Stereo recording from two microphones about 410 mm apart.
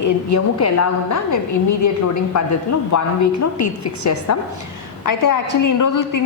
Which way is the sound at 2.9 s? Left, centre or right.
Left.